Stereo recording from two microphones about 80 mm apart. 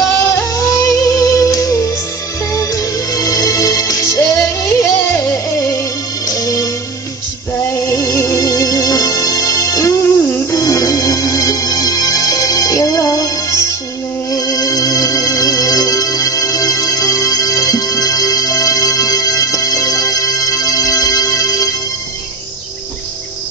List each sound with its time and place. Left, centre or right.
0.2 s music: left
6.2 s music: left